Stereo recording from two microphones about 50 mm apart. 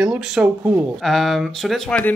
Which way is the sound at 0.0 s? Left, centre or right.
Centre.